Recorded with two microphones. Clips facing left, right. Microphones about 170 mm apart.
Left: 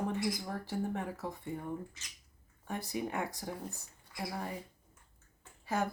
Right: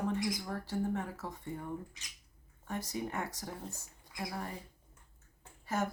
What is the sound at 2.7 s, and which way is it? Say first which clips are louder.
Speech: left 1 dB; 15° left (ahead or behind).